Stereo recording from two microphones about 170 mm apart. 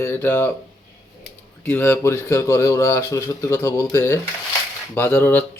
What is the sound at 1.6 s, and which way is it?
Speech, 10° left (ahead or behind).